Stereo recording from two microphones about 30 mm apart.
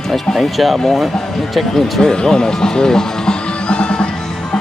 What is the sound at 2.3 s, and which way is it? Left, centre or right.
Music, left.